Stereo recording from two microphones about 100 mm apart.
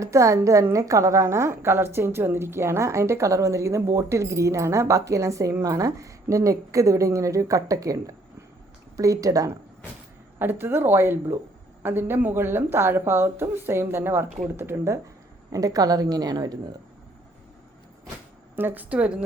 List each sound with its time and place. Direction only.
0.0 s a woman's voice: 30° right (ahead or behind)
10.3 s speech: 20° right (ahead or behind)
15.5 s a woman's voice: 35° right (ahead or behind)
18.5 s a woman's voice: 20° right (ahead or behind)